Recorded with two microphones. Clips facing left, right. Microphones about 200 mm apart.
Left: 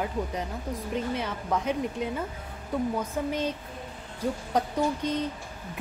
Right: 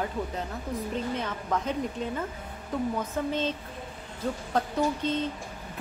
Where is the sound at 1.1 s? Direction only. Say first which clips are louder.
Left 1 dB; 10° left (ahead or behind).